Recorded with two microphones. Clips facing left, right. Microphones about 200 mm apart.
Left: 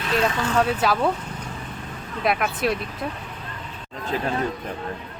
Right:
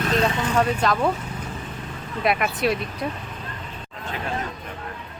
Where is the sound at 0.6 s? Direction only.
5° left (ahead or behind).